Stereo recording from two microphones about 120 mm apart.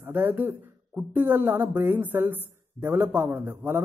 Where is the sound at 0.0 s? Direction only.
15° right (ahead or behind).